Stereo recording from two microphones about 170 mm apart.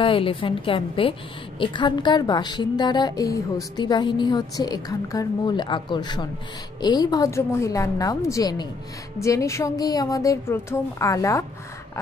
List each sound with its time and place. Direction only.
0.0 s a woman's voice: 30° left (ahead or behind)